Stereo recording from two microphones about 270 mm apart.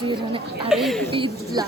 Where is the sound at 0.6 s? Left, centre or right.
Centre.